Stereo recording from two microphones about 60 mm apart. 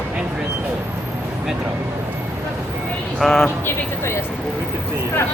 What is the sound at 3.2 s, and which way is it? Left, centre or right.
Speech, centre.